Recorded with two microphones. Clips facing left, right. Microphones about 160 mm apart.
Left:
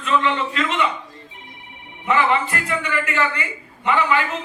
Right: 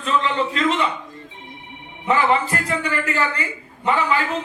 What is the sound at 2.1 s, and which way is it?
A man's voice, 35° right (ahead or behind).